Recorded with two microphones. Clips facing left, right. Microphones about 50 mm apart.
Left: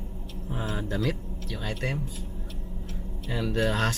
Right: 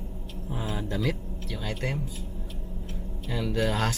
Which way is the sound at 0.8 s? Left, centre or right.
Centre.